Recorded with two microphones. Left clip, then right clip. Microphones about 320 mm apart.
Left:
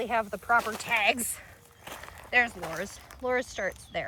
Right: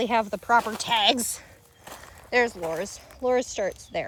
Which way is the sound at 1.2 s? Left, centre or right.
Centre.